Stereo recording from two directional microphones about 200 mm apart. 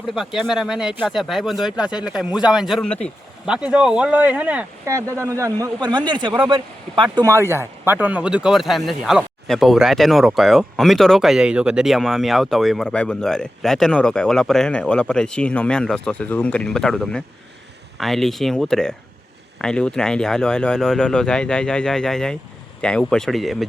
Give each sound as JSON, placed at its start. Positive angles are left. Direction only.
{"t": 0.1, "sound": "speech", "side_deg": 0}